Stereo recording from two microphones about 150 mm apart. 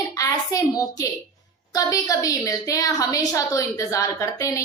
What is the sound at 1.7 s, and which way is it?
A woman's voice, 25° left (ahead or behind).